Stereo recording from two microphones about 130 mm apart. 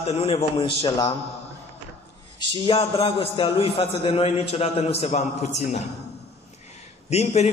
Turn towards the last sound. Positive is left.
turn(degrees=55)  # may be behind; listen again after turning